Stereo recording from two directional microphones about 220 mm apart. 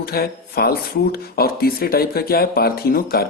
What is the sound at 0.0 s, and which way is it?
Speech, 45° left (ahead or behind).